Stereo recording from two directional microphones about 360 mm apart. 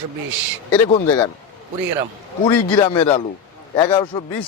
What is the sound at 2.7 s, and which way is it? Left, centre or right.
A man's voice, centre.